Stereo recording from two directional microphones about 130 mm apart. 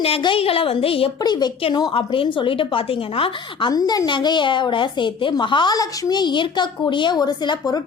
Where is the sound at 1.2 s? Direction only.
30° left (ahead or behind).